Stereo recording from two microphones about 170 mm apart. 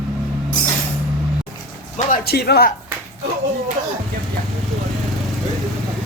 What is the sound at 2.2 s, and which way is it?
Speech, 70° left (ahead or behind).